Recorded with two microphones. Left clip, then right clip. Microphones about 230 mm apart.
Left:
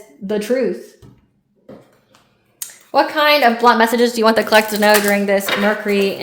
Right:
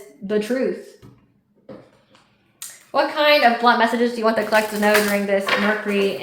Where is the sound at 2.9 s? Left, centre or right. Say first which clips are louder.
Left 3 dB; left.